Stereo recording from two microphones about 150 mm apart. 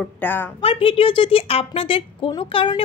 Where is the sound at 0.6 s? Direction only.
40° left (ahead or behind).